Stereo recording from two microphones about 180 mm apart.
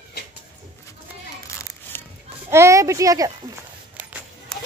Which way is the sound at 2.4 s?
15° right (ahead or behind).